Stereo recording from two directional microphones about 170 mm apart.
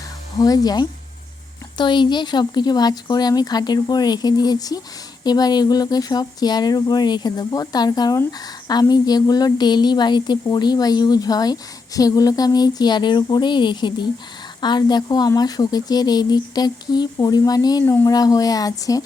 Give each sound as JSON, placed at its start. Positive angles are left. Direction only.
{"t": 0.3, "sound": "speech", "side_deg": 20}